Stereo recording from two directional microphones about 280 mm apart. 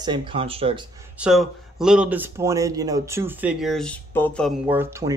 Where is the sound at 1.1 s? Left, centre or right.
Centre.